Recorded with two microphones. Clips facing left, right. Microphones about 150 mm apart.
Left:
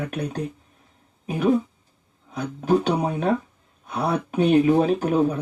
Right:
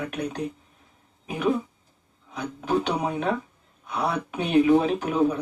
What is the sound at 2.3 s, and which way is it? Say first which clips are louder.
A man's voice: left 5 dB; 45° left (ahead or behind).